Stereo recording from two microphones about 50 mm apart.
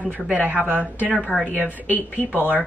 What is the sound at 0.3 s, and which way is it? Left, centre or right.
Speech, right.